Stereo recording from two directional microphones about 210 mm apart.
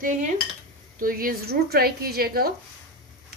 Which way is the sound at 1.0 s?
45° right (ahead or behind).